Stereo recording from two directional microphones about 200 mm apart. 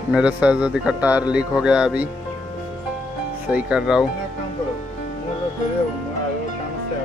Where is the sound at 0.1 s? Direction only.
5° right (ahead or behind).